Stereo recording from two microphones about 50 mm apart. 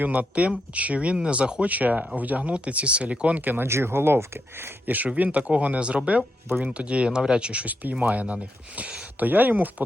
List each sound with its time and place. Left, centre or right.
0.0 s speech: right
1.6 s speech: right
3.6 s speech: right
4.9 s speech: right
6.5 s speech: centre
7.7 s speech: right
7.9 s speech: right